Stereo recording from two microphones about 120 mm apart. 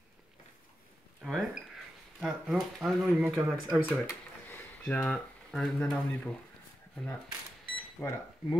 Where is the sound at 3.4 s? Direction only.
15° right (ahead or behind).